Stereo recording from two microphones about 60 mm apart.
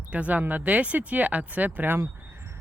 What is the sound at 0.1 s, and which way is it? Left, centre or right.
Speech, right.